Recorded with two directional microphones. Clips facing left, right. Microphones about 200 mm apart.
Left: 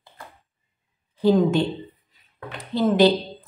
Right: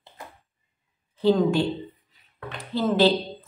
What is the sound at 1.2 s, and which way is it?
A woman's voice, 15° left (ahead or behind).